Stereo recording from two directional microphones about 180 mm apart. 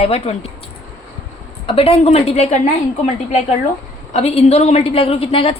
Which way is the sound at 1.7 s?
30° left (ahead or behind).